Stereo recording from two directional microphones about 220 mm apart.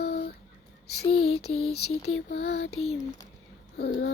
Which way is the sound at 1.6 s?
80° left.